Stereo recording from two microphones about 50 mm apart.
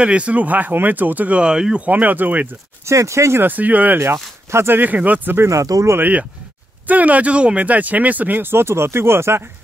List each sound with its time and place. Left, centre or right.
0.0 s speech: right
1.4 s speech: centre
1.9 s speech: right
2.8 s speech: right
3.3 s speech: right
4.0 s speech: right
4.7 s speech: right
5.4 s speech: right
5.9 s speech: right